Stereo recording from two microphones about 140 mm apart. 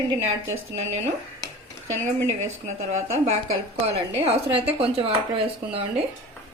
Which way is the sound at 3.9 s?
45° right (ahead or behind).